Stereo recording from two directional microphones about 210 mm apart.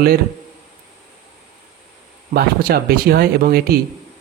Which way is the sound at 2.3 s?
45° right (ahead or behind).